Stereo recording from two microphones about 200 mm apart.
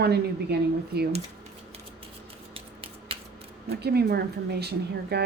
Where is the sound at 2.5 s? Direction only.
30° right (ahead or behind).